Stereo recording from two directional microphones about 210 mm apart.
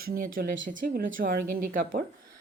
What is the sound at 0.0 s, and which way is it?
A woman's voice, 45° right (ahead or behind).